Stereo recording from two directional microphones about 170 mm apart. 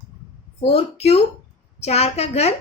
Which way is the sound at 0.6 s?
35° left (ahead or behind).